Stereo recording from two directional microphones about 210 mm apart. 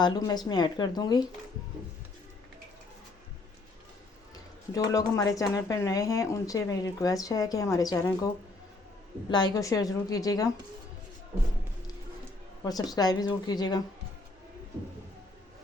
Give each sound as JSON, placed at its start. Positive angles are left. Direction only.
{"t": 0.0, "sound": "speech", "side_deg": 20}
{"t": 4.7, "sound": "speech", "side_deg": 15}
{"t": 9.3, "sound": "speech", "side_deg": 20}
{"t": 12.6, "sound": "speech", "side_deg": 20}